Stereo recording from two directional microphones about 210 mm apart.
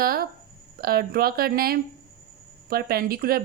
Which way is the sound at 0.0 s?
45° right (ahead or behind).